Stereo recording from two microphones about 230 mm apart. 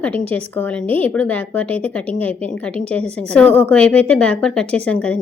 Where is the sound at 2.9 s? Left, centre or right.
Centre.